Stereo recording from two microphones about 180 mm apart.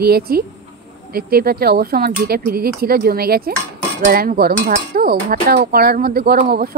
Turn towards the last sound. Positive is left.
turn(degrees=-55)  # may be behind; listen again after turning